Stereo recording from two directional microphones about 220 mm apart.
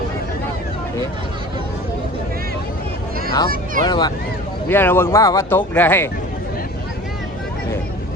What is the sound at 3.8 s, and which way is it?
Speech, 20° left (ahead or behind).